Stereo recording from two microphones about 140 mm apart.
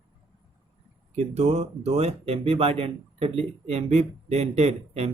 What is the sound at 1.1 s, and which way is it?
Speech, 50° right (ahead or behind).